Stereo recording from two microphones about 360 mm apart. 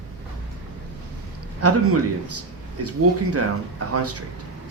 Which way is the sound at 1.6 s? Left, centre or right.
Right.